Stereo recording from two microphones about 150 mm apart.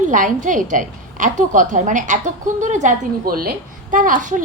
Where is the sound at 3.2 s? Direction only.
80° right; by 4.4 s 60° right (ahead or behind).